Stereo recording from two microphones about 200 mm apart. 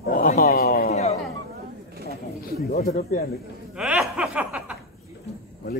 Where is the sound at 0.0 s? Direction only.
45° left (ahead or behind).